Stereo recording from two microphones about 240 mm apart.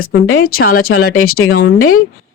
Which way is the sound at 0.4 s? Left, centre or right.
Left.